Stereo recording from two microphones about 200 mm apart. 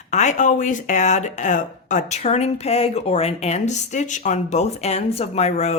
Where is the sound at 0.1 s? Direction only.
35° left (ahead or behind).